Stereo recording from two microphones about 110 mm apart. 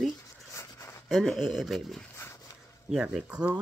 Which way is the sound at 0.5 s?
25° left (ahead or behind).